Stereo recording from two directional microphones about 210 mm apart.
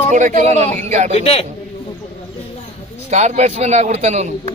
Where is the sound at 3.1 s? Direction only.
35° right (ahead or behind).